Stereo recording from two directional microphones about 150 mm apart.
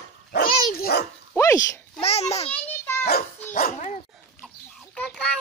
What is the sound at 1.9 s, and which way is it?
Speech, 45° left (ahead or behind).